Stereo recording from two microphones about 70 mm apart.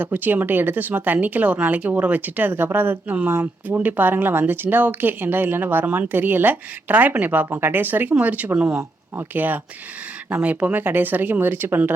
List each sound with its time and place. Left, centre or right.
0.0 s speech: right